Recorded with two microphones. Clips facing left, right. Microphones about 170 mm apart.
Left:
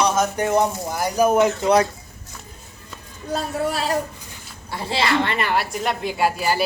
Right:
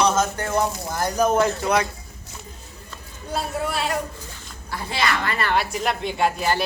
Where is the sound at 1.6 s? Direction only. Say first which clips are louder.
Left 5 dB; 35° left (ahead or behind).